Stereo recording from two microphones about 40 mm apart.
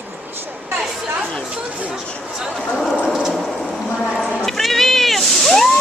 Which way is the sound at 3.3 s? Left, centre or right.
Centre.